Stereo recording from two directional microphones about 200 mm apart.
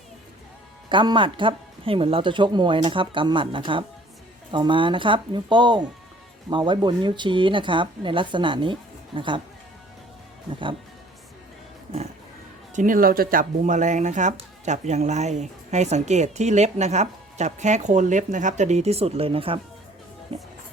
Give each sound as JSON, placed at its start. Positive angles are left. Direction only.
{"t": 0.9, "sound": "speech", "side_deg": -25}
{"t": 12.7, "sound": "speech", "side_deg": -40}